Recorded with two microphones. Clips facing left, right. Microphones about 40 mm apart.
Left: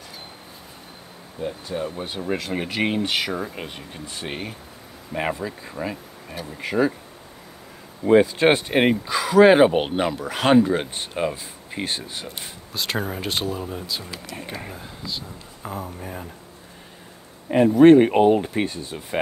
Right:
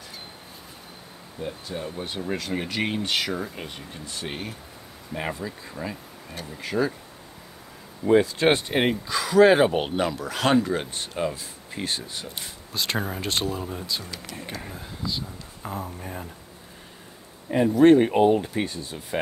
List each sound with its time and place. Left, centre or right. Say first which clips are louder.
1.4 s speech: left 5 dB; centre; by 6.9 s left
8.0 s speech: left 3 dB; left
12.4 s speech: right 2 dB; centre
14.0 s speech: left 2 dB; centre
14.8 s speech: right 1 dB; centre
17.5 s speech: left 4 dB; left
18.4 s speech: left 3 dB; left